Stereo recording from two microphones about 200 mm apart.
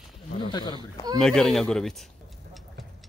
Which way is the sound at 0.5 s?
20° left (ahead or behind).